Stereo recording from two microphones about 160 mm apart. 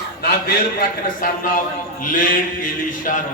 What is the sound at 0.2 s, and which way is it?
A man's voice, 70° left (ahead or behind).